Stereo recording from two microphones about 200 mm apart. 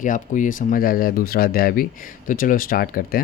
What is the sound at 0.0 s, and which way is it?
Speech, 40° left (ahead or behind).